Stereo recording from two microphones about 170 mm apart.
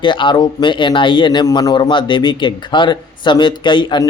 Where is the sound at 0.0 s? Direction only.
30° left (ahead or behind).